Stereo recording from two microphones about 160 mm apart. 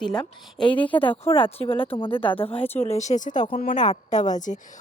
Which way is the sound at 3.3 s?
25° left (ahead or behind).